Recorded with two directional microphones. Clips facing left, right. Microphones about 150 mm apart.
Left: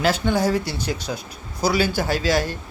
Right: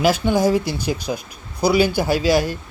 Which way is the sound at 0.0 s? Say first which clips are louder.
Right 3 dB; 10° right (ahead or behind).